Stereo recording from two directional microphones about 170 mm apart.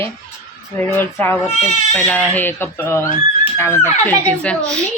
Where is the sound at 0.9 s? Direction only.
10° left (ahead or behind).